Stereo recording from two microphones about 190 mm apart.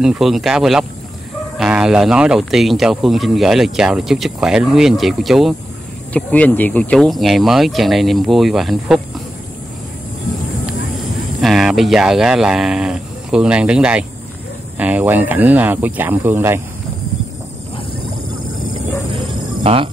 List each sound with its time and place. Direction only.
0.0 s speech: centre (ahead or behind)
11.4 s speech: centre (ahead or behind)
19.1 s music: 30° right (ahead or behind)